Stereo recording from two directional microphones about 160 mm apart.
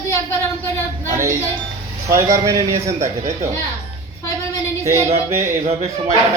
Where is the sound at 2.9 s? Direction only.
45° right (ahead or behind).